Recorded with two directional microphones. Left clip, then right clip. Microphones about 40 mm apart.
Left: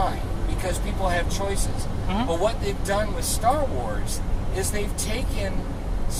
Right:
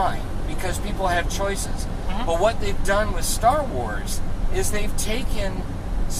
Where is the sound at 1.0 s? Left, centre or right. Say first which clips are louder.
Right 3 dB; right.